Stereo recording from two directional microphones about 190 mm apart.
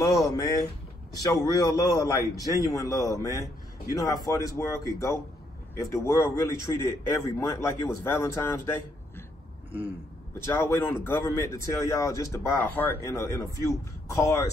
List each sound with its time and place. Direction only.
0.0 s a man's voice: 20° left (ahead or behind)
10.4 s speech: 15° left (ahead or behind)